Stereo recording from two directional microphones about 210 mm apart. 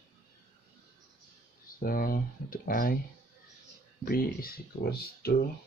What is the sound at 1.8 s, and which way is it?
Speech, 45° left (ahead or behind).